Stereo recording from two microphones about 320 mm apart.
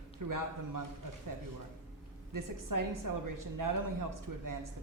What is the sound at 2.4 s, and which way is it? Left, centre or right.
A woman's voice, right.